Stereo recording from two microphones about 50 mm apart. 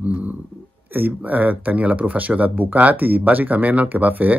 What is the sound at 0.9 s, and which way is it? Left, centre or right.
Speech, right.